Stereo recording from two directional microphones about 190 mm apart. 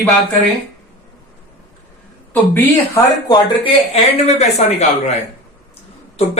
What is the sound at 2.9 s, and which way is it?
Speech, 20° left (ahead or behind).